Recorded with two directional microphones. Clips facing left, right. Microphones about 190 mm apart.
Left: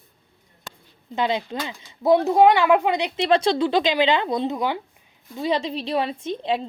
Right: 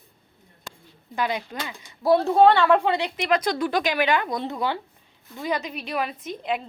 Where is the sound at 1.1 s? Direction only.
25° left (ahead or behind).